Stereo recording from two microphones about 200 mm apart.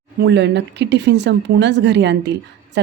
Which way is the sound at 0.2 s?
60° right (ahead or behind).